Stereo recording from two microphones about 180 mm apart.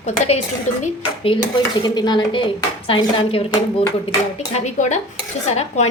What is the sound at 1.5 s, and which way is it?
A woman's voice, 25° left (ahead or behind).